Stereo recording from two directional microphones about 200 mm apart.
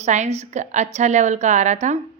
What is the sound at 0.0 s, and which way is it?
A woman's voice, 35° right (ahead or behind).